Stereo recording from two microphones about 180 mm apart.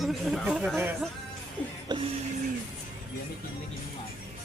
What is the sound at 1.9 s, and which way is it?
Speech, 25° right (ahead or behind).